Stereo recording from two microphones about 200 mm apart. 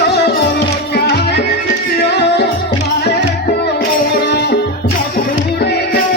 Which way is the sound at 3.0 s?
55° left (ahead or behind).